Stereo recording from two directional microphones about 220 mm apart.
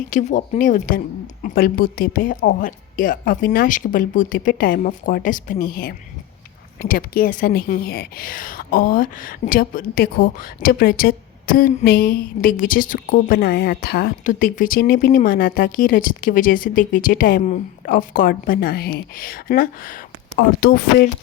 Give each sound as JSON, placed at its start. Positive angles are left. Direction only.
{"t": 0.1, "sound": "speech", "side_deg": 35}